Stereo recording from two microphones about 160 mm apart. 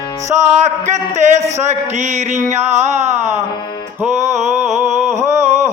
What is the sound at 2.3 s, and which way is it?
Music, 45° right (ahead or behind).